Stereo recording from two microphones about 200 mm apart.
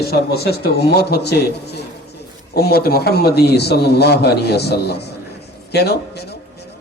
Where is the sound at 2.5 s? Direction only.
50° left (ahead or behind).